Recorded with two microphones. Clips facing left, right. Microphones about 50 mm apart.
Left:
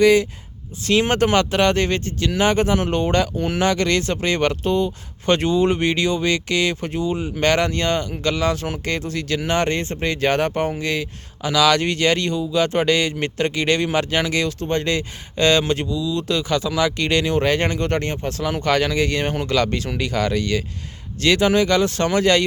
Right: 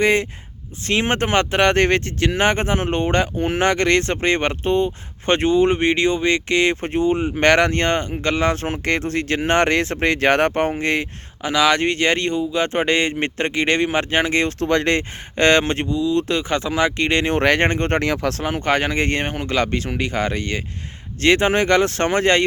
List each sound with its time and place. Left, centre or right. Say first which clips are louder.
0.0 s speech: left 3 dB; right
0.9 s speech: left 2 dB; right
9.6 s speech: right 4 dB; right
11.4 s speech: even; right
14.6 s speech: right 3 dB; right
17.3 s speech: right 2 dB; right
18.0 s speech: right 5 dB; right
18.4 s speech: left 2 dB; right
19.2 s speech: left 1 dB; right